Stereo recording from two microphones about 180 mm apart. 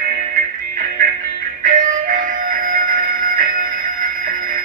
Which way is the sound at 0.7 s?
55° right (ahead or behind).